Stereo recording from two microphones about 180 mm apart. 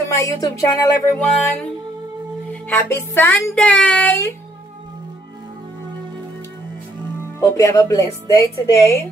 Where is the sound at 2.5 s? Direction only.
10° left (ahead or behind).